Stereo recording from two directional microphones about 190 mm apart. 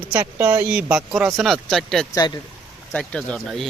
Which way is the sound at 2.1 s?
25° left (ahead or behind).